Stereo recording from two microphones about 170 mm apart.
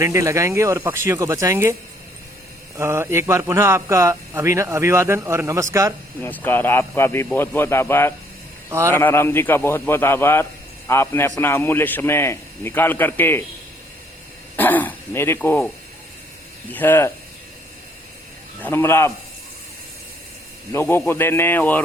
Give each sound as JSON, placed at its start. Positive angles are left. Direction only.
{"t": 0.0, "sound": "a man's voice", "side_deg": -15}
{"t": 2.7, "sound": "a man's voice", "side_deg": -15}
{"t": 6.1, "sound": "a man's voice", "side_deg": 10}
{"t": 14.5, "sound": "speech", "side_deg": 10}
{"t": 16.7, "sound": "a man's voice", "side_deg": 10}
{"t": 18.6, "sound": "a man's voice", "side_deg": 15}
{"t": 20.7, "sound": "a man's voice", "side_deg": 15}